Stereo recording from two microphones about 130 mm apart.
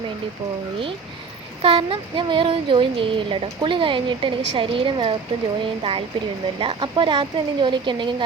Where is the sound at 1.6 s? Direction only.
40° right (ahead or behind).